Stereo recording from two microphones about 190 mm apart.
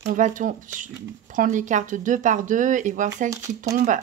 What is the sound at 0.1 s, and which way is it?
Speech, 45° right (ahead or behind).